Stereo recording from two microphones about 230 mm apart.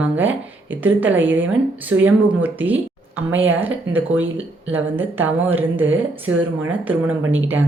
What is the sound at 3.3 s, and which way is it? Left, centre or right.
Speech, right.